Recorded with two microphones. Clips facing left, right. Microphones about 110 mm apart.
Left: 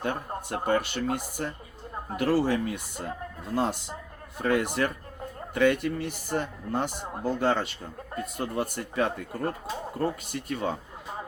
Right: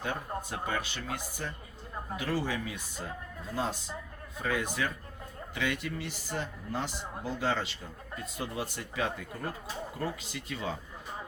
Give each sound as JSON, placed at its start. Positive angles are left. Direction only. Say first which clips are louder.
{"t": 0.0, "sound": "speech", "louder": "left 4 dB", "side_deg": 55}
{"t": 5.5, "sound": "speech", "louder": "left 10 dB", "side_deg": 50}